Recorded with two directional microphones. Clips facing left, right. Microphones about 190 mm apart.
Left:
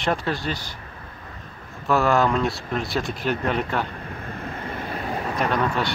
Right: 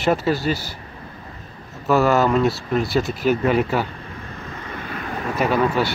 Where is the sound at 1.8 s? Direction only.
Centre (ahead or behind).